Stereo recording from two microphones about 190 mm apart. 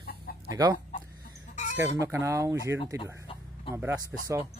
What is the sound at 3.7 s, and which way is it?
Speech, 15° right (ahead or behind).